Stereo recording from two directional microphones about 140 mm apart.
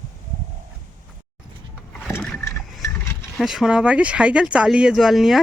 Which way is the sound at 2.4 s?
20° left (ahead or behind).